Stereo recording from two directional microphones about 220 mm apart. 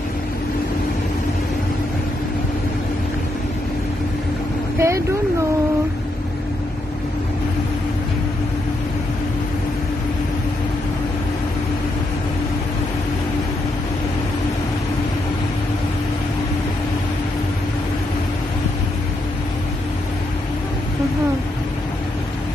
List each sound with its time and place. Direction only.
4.7 s vehicle: 10° right (ahead or behind)